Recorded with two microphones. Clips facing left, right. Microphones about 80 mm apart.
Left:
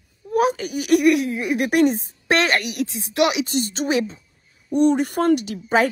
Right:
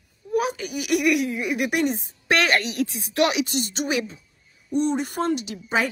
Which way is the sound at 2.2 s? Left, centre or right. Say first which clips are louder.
Left 1 dB; left.